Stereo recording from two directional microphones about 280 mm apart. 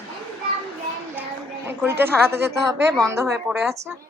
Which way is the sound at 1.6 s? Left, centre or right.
Centre.